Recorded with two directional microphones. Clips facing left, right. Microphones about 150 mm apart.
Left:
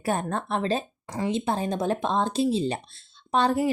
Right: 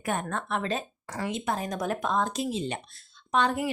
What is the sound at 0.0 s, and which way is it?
Speech, 35° left (ahead or behind).